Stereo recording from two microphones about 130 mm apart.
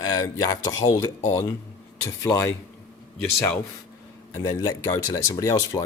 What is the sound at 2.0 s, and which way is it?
Speech, 20° left (ahead or behind).